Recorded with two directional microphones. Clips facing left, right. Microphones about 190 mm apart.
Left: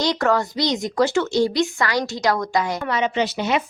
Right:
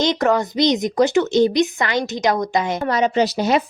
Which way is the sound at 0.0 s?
20° right (ahead or behind).